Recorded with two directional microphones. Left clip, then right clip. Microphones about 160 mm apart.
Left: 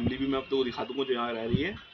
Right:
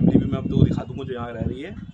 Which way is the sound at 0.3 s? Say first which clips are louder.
Right 3 dB; 50° right (ahead or behind).